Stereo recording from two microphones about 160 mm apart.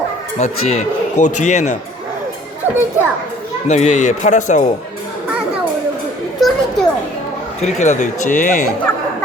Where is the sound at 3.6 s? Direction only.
45° left (ahead or behind).